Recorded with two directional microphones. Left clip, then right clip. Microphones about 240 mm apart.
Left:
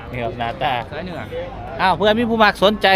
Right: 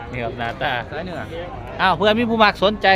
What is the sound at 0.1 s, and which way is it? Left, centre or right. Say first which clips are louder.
Speech: left 2 dB; centre.